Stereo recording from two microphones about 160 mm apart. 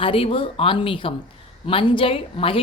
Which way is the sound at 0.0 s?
35° left (ahead or behind).